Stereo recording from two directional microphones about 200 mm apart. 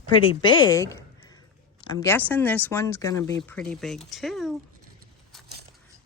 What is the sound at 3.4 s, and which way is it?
Speech, 5° left (ahead or behind).